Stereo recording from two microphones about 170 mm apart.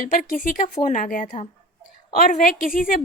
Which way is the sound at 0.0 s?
50° left (ahead or behind).